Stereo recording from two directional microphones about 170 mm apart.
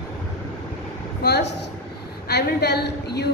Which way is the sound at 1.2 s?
75° left (ahead or behind).